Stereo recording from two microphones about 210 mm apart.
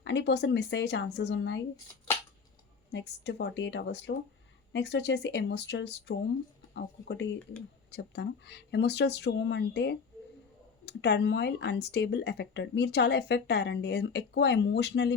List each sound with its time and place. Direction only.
0.0 s speech: 55° left (ahead or behind)
2.1 s a sound: 10° left (ahead or behind)
2.9 s speech: 55° left (ahead or behind)